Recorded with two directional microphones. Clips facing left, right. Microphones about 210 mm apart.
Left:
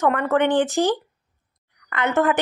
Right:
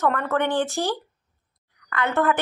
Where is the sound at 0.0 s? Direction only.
15° left (ahead or behind).